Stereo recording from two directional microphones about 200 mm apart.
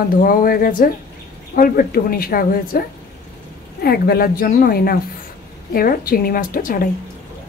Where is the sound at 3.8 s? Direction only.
50° left (ahead or behind).